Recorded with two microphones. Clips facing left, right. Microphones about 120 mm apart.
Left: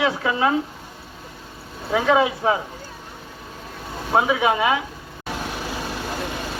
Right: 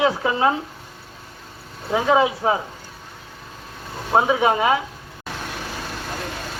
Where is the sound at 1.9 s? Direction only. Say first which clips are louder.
Even; 20° right (ahead or behind).